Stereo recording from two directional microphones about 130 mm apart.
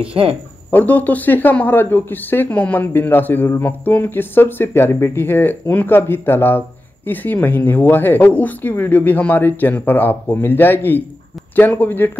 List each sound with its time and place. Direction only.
0.1 s speech: 45° right (ahead or behind)
0.7 s speech: 15° left (ahead or behind)